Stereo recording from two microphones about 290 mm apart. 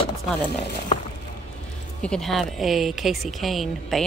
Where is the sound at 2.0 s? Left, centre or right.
Centre.